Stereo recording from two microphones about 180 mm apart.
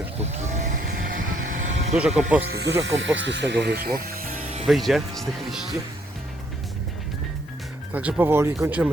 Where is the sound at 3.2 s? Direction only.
80° right; by 4.5 s 55° right (ahead or behind).